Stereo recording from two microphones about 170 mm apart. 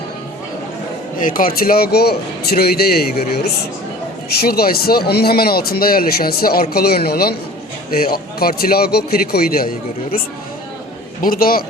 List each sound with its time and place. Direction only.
1.2 s speech: 55° left (ahead or behind)